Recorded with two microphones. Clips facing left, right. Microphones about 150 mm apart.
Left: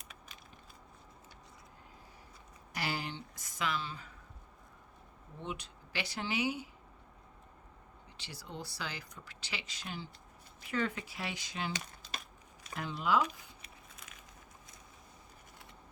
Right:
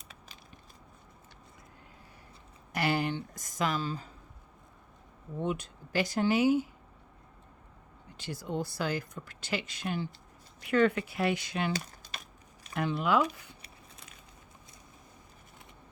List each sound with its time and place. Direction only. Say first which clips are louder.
2.7 s speech: right 9 dB; 55° right (ahead or behind); by 4.1 s 40° right (ahead or behind)
5.4 s speech: right 9 dB; 50° right (ahead or behind)
8.2 s speech: right 11 dB; 50° right (ahead or behind)
12.7 s speech: right 4 dB; 60° right (ahead or behind)